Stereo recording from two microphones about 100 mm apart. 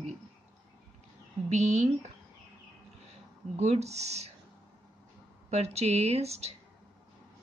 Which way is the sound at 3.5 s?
90° right.